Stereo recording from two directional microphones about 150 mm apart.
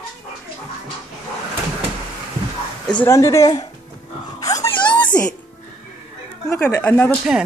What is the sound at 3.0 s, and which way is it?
Speech, 20° left (ahead or behind).